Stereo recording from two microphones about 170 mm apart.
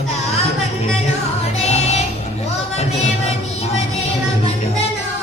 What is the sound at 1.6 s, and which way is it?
Music, 40° left (ahead or behind).